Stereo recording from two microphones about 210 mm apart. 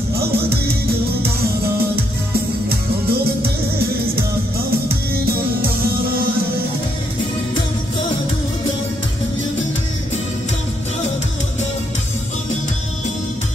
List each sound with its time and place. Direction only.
2.7 s music: 45° right (ahead or behind)
4.8 s music: 45° right (ahead or behind)